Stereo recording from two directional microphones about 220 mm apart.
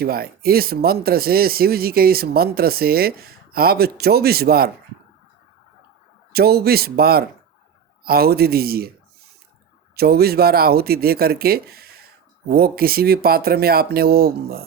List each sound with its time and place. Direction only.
0.0 s speech: 45° right (ahead or behind)
6.3 s speech: 45° right (ahead or behind)